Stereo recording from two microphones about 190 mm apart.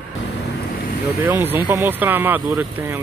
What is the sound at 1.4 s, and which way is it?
Speech, 10° right (ahead or behind).